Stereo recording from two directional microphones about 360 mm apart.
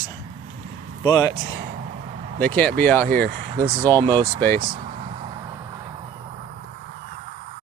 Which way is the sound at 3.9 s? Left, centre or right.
Centre.